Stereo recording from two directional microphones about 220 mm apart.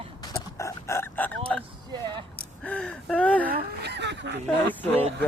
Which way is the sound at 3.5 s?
45° right (ahead or behind).